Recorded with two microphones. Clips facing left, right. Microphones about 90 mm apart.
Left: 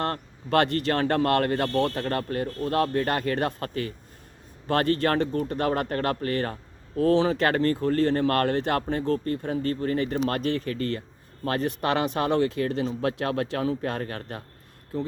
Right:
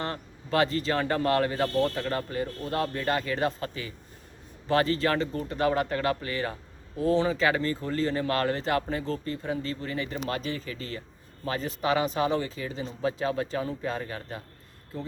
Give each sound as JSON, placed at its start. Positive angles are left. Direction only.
{"t": 0.0, "sound": "speech", "side_deg": 60}